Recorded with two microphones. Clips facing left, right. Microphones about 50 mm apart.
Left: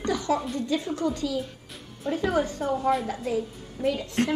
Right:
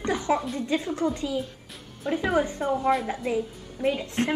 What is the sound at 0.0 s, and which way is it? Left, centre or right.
Music, right.